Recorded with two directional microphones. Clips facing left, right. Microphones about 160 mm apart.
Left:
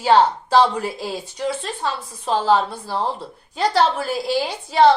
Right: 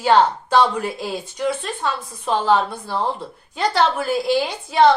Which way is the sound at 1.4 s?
30° left (ahead or behind).